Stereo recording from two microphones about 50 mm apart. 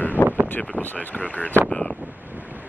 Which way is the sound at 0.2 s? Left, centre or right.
Left.